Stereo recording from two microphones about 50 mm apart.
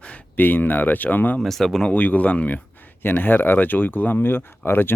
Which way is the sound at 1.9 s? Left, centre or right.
Left.